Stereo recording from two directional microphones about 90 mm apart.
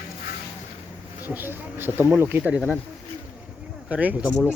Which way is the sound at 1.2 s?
20° right (ahead or behind).